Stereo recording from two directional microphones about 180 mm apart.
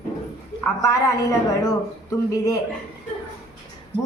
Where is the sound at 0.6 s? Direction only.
15° left (ahead or behind).